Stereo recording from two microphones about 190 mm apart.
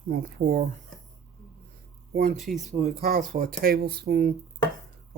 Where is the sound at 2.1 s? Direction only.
45° right (ahead or behind).